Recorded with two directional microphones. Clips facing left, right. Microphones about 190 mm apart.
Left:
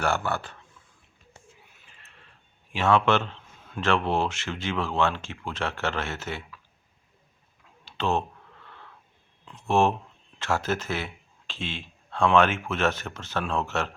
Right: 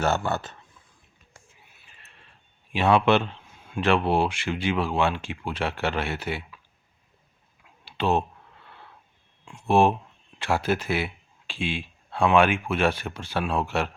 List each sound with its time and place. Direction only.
0.0 s speech: 20° right (ahead or behind)
2.7 s speech: 15° right (ahead or behind)
7.9 s a sound: 15° right (ahead or behind)
9.4 s speech: 10° right (ahead or behind)